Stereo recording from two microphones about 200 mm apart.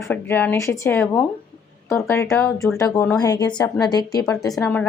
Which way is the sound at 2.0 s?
15° left (ahead or behind).